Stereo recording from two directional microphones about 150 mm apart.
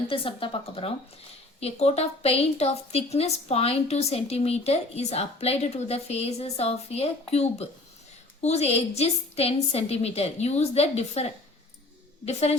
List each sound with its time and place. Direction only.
0.1 s a woman's voice: 35° left (ahead or behind)